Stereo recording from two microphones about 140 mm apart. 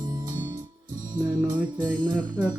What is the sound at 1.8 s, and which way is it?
Music, 30° right (ahead or behind).